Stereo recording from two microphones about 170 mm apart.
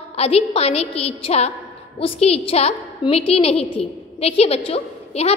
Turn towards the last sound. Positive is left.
turn(degrees=35)  # may be behind; listen again after turning